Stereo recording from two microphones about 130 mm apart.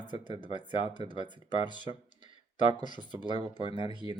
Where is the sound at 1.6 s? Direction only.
35° left (ahead or behind).